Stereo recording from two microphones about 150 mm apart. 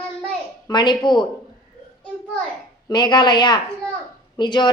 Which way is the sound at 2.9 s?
30° left (ahead or behind).